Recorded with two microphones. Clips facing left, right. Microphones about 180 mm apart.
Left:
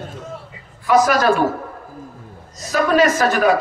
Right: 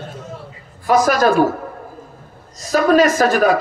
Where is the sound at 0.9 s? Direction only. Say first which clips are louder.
Even; 40° right (ahead or behind).